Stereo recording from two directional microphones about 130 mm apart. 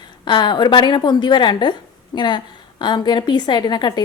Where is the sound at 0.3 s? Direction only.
35° left (ahead or behind).